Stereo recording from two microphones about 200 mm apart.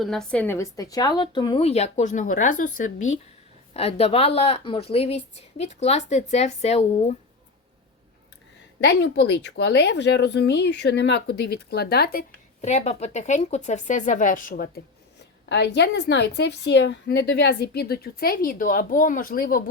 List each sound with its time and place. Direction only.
0.0 s a woman's voice: centre (ahead or behind); by 7.2 s 35° left (ahead or behind)
8.8 s a woman's voice: 60° left (ahead or behind)
12.6 s speech: 35° left (ahead or behind)
15.4 s a woman's voice: 60° left (ahead or behind)